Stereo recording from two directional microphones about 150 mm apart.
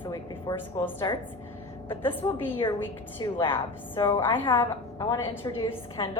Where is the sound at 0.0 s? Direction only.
20° left (ahead or behind).